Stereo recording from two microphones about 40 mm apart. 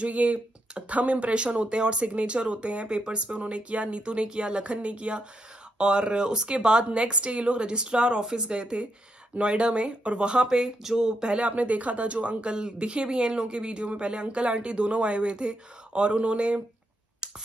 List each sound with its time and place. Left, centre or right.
0.0 s speech: right